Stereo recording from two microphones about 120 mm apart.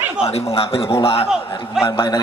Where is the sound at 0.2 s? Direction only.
55° left (ahead or behind).